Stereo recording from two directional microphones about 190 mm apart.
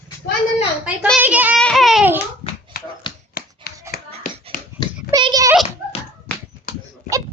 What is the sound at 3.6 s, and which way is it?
Clapping, 50° left (ahead or behind).